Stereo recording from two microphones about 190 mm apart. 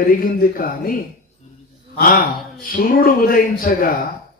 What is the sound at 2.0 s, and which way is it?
A man's voice, 50° left (ahead or behind).